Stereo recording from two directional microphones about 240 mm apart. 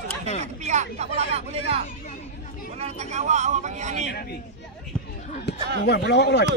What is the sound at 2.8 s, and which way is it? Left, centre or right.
Speech, right.